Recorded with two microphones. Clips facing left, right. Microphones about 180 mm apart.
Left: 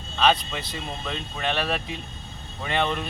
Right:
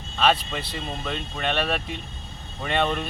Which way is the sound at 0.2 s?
Centre (ahead or behind).